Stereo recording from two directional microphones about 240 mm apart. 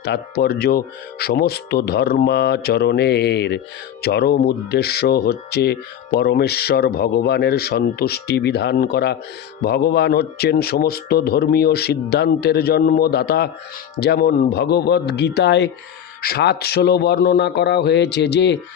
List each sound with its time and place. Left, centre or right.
0.0 s speech: left